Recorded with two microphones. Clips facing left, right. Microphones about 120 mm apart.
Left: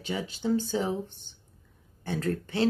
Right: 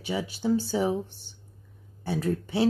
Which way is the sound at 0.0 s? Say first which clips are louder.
Right 2 dB; 10° right (ahead or behind).